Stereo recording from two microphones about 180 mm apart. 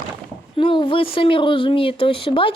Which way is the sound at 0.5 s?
25° left (ahead or behind).